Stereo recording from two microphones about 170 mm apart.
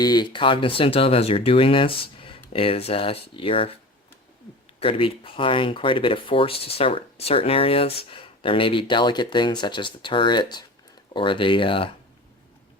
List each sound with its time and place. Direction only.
0.0 s speech: 25° left (ahead or behind)
4.8 s speech: 35° left (ahead or behind)